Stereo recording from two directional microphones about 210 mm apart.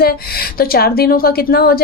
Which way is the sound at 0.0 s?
45° left (ahead or behind).